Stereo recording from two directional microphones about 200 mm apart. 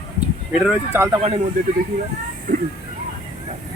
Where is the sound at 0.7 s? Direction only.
10° right (ahead or behind).